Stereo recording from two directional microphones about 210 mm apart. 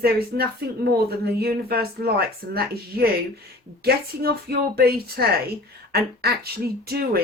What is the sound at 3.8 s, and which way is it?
A woman's voice, 50° right (ahead or behind).